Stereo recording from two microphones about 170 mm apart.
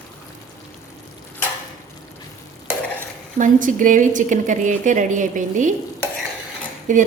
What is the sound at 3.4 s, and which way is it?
A woman's voice, 50° right (ahead or behind).